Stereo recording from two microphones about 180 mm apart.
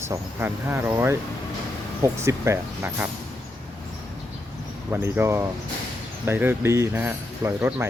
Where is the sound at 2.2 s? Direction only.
15° right (ahead or behind).